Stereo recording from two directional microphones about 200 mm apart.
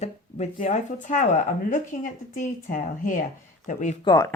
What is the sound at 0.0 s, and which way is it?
Speech, 35° left (ahead or behind).